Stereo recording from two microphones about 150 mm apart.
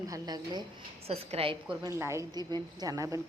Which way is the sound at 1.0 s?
40° right (ahead or behind).